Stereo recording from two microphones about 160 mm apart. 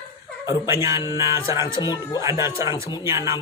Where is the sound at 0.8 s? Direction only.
20° right (ahead or behind).